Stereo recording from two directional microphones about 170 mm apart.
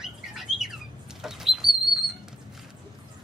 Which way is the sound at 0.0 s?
Centre (ahead or behind).